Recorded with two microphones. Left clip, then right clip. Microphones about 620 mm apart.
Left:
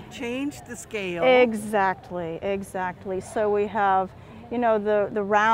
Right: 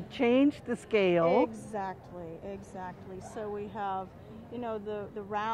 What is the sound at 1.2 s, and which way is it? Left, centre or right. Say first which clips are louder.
A woman's voice: left 9 dB; left.